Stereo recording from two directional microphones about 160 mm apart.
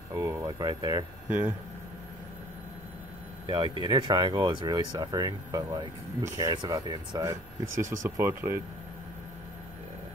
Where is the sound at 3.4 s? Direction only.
30° right (ahead or behind).